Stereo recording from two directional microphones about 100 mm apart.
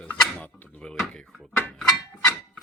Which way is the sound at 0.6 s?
15° left (ahead or behind).